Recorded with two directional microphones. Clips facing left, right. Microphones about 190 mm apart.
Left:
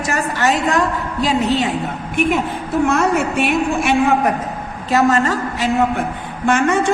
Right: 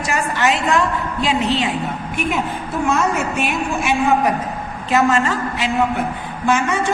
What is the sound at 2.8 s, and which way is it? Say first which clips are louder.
A woman's voice: left 2 dB; 60° left (ahead or behind).